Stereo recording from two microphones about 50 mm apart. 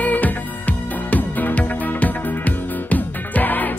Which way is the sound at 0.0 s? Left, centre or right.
Left.